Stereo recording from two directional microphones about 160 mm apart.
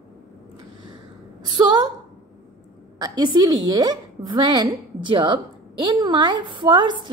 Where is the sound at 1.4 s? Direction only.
25° right (ahead or behind).